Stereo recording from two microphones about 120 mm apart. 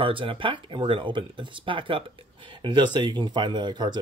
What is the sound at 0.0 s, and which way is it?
Speech, 45° right (ahead or behind).